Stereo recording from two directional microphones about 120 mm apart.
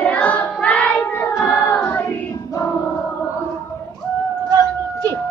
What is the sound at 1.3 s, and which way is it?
Choir, 15° left (ahead or behind).